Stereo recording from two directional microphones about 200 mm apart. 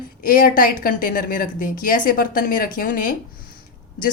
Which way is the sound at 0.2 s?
45° left (ahead or behind).